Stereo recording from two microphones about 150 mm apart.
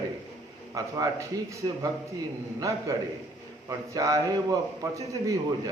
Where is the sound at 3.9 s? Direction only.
20° right (ahead or behind).